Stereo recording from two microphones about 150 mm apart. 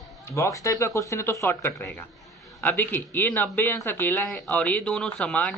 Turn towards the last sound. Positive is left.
turn(degrees=10)  # may be behind; listen again after turning